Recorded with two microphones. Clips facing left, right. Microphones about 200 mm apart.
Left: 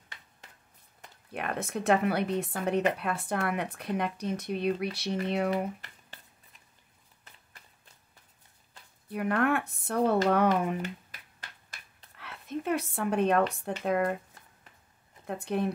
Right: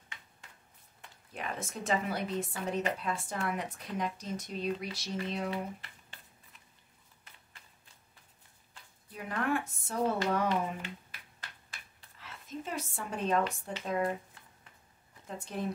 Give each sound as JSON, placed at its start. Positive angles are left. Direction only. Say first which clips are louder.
{"t": 1.3, "sound": "a woman's voice", "louder": "left 6 dB", "side_deg": 65}
{"t": 9.1, "sound": "a woman's voice", "louder": "left 6 dB", "side_deg": 65}
{"t": 12.2, "sound": "speech", "louder": "left 6 dB", "side_deg": 65}
{"t": 15.2, "sound": "a woman's voice", "louder": "left 7 dB", "side_deg": 60}